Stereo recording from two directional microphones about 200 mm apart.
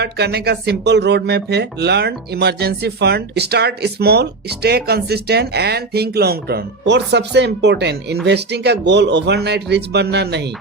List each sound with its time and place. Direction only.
0.0 s speech: 55° right (ahead or behind)